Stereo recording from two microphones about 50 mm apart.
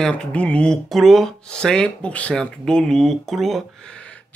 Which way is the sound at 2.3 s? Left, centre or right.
Centre.